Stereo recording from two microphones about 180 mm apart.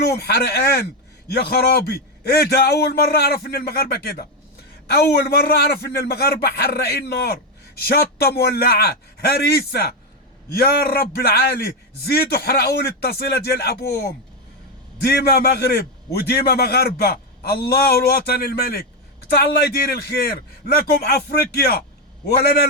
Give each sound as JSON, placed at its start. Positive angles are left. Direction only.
{"t": 0.0, "sound": "a man's voice", "side_deg": 60}
{"t": 8.4, "sound": "a man's voice", "side_deg": 60}